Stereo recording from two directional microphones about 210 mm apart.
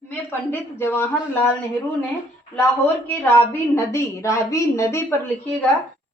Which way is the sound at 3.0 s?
10° left (ahead or behind).